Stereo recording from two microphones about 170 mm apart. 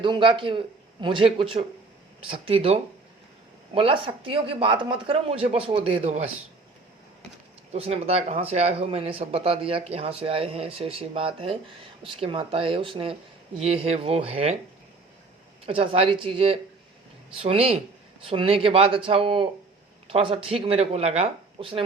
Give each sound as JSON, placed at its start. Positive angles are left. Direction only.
{"t": 0.0, "sound": "a man's voice", "side_deg": -30}
{"t": 3.8, "sound": "speech", "side_deg": -30}
{"t": 7.7, "sound": "speech", "side_deg": -35}
{"t": 15.6, "sound": "speech", "side_deg": -35}